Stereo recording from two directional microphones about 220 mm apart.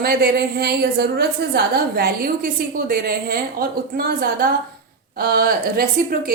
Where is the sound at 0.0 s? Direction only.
45° right (ahead or behind).